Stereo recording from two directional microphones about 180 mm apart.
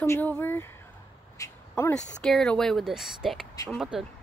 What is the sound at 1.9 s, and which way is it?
Speech, 5° left (ahead or behind).